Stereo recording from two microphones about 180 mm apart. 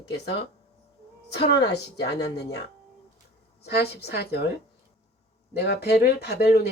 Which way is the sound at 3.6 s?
65° left (ahead or behind).